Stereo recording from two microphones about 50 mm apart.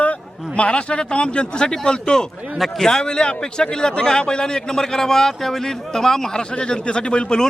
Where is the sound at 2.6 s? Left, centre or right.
Centre.